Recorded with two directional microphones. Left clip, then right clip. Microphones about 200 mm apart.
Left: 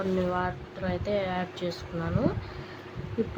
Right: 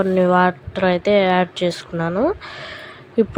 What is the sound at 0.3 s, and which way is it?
A woman's voice, 40° right (ahead or behind).